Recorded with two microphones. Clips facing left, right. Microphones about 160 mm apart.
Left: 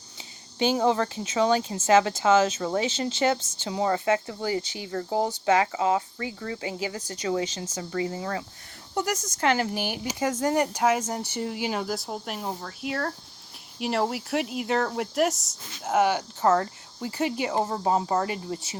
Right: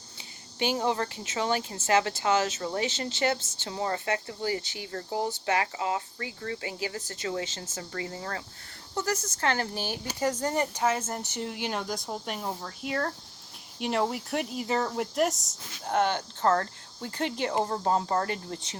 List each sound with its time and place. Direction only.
0.8 s speech: 25° left (ahead or behind)
4.9 s speech: 30° left (ahead or behind); by 18.8 s 5° left (ahead or behind)